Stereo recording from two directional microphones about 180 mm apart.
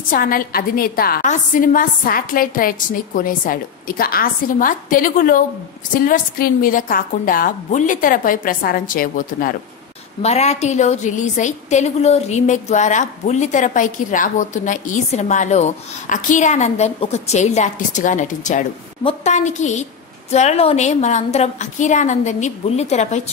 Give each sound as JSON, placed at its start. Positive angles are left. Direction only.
{"t": 0.1, "sound": "a woman's voice", "side_deg": 50}
{"t": 10.2, "sound": "a woman's voice", "side_deg": 35}